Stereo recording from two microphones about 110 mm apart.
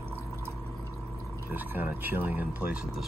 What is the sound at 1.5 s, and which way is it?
Speech, 15° right (ahead or behind).